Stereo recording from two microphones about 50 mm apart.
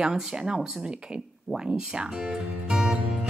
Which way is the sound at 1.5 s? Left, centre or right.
Centre.